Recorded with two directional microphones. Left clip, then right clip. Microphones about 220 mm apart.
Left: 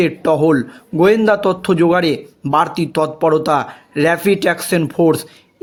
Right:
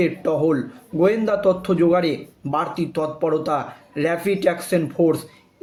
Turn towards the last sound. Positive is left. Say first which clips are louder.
# left 5 dB
turn(degrees=45)  # may be behind; listen again after turning